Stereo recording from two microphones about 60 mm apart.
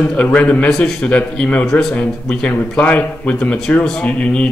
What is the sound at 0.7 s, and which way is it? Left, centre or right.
A man's voice, centre.